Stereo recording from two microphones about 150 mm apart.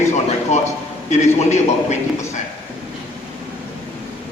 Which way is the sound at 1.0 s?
50° left (ahead or behind).